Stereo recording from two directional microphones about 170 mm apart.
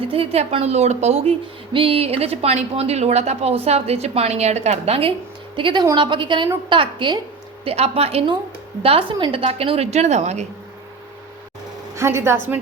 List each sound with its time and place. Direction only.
0.1 s a woman's voice: 35° right (ahead or behind)
11.9 s a woman's voice: 15° right (ahead or behind)